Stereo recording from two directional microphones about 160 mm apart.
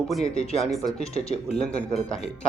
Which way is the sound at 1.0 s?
40° left (ahead or behind).